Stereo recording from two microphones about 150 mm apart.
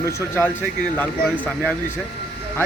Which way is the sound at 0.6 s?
5° left (ahead or behind).